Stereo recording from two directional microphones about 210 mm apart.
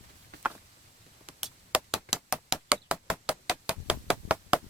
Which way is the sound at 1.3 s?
5° right (ahead or behind).